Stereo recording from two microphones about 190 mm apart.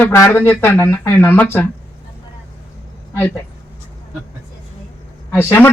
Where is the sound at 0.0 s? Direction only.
15° left (ahead or behind).